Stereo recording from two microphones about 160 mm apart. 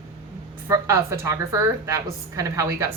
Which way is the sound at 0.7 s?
20° right (ahead or behind).